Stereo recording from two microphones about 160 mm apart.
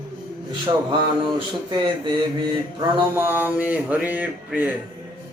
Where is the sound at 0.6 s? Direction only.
30° right (ahead or behind).